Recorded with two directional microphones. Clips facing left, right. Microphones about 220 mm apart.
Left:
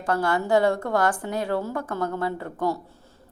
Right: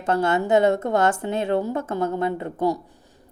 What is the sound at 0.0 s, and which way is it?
A woman's voice, 25° right (ahead or behind).